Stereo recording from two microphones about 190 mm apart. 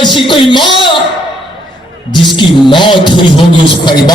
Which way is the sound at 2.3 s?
25° left (ahead or behind).